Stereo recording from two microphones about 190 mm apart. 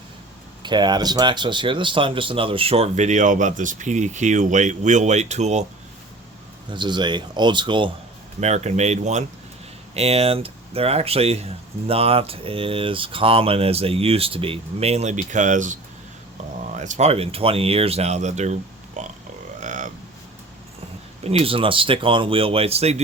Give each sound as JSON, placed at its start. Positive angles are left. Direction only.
{"t": 0.6, "sound": "speech", "side_deg": -25}
{"t": 6.7, "sound": "speech", "side_deg": -25}
{"t": 8.4, "sound": "speech", "side_deg": -35}
{"t": 19.5, "sound": "grunt", "side_deg": -40}
{"t": 21.2, "sound": "speech", "side_deg": -30}